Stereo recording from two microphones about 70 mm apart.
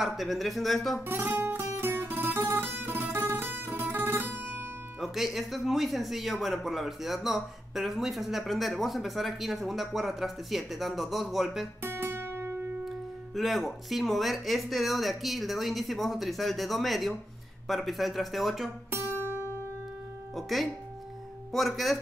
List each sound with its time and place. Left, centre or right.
0.0 s speech: centre
1.0 s guitar: right
5.0 s speech: centre
11.8 s guitar: right
12.8 s speech: centre
20.3 s speech: centre